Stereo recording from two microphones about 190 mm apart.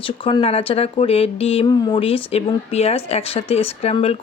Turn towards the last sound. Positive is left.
turn(degrees=30)  # may be behind; listen again after turning